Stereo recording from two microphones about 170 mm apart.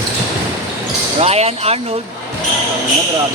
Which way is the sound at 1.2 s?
35° right (ahead or behind).